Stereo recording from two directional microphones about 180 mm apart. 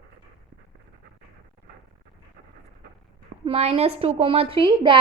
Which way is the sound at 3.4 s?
35° right (ahead or behind).